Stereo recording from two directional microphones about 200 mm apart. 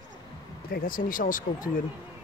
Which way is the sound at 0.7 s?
45° left (ahead or behind).